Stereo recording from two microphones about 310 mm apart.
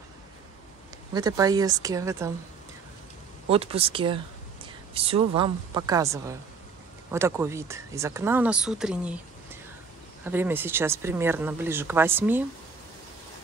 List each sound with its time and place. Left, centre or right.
1.1 s speech: centre
3.4 s speech: centre